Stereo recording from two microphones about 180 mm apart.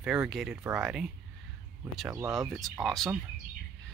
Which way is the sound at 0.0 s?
5° right (ahead or behind).